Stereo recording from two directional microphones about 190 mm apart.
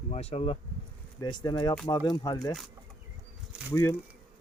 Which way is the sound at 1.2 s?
20° left (ahead or behind).